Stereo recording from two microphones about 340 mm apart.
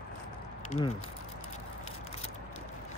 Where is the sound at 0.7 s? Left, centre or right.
Centre.